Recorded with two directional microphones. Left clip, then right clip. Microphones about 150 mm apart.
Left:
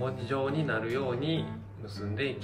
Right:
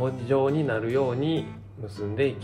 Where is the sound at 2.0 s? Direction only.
45° right (ahead or behind).